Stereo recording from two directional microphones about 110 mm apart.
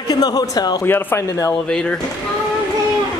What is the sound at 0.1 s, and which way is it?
Speech, 40° left (ahead or behind).